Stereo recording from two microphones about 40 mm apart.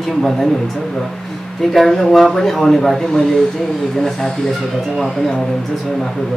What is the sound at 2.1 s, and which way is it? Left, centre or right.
Speech, centre.